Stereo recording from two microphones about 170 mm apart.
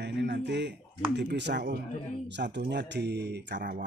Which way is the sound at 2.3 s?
90° right.